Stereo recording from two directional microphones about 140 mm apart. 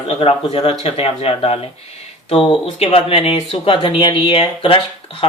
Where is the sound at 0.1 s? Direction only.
45° left (ahead or behind).